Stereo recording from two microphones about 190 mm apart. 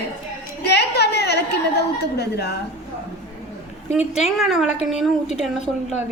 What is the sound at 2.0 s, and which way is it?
Speech, 60° left (ahead or behind).